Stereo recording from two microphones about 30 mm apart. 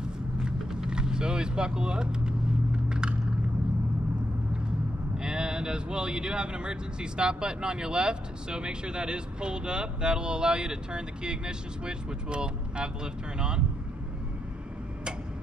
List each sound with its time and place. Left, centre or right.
0.4 s vehicle: right
5.1 s speech: right